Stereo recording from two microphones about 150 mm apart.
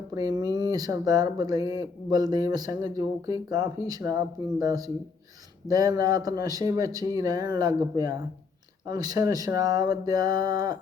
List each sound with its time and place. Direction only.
0.1 s speech: 25° right (ahead or behind)